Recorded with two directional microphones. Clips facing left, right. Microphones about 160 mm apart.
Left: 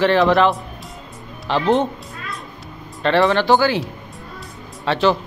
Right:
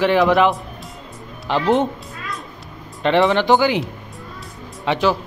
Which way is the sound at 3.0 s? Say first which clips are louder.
Even; 15° right (ahead or behind).